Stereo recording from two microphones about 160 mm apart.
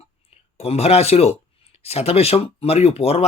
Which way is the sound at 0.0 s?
40° left (ahead or behind).